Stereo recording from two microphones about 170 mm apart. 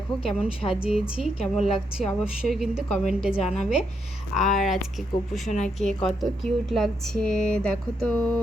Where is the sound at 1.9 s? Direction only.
Centre (ahead or behind).